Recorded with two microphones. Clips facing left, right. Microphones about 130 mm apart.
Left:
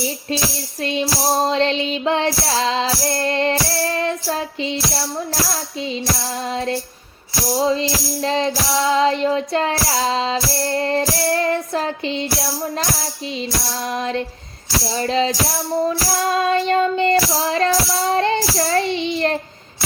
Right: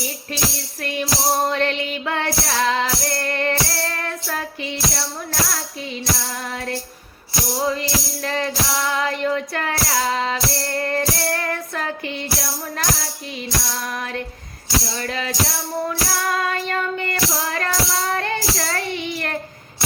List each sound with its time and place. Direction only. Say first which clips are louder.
0.8 s music: left 3 dB; 20° left (ahead or behind)
7.6 s music: left 4 dB; 20° left (ahead or behind)
14.9 s music: left 6 dB; 25° left (ahead or behind)